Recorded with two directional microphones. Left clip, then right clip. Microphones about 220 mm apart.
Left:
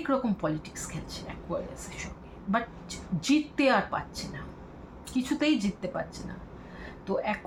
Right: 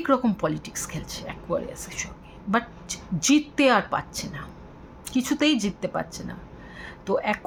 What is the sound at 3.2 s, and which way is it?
Speech, 55° right (ahead or behind).